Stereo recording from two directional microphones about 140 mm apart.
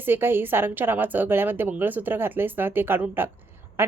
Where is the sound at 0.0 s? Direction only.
15° right (ahead or behind).